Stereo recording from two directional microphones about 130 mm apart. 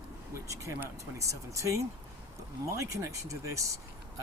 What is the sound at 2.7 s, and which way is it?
Speech, 25° right (ahead or behind).